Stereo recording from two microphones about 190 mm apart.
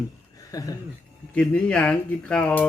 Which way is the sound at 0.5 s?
20° left (ahead or behind).